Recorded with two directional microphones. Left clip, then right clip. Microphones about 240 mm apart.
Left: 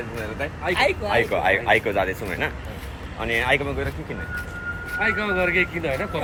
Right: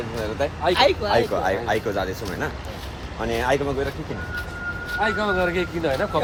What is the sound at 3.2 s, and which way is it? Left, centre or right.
Speech, centre.